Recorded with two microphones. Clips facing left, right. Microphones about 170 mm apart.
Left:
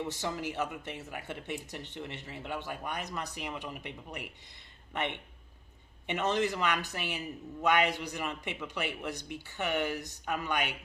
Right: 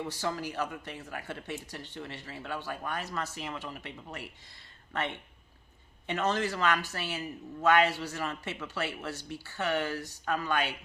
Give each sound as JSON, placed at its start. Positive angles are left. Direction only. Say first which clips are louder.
{"t": 0.0, "sound": "a man's voice", "louder": "right 1 dB", "side_deg": 20}